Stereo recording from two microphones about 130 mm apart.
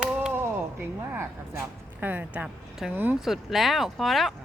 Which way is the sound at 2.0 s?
15° right (ahead or behind).